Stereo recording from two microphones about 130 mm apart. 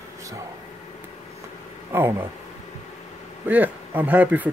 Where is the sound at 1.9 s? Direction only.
15° right (ahead or behind).